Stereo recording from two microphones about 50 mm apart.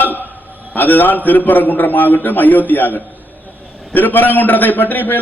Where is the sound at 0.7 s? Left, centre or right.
Left.